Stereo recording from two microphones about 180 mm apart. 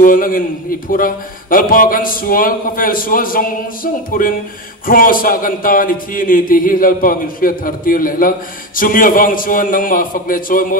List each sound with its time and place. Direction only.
0.0 s a man's voice: 50° left (ahead or behind)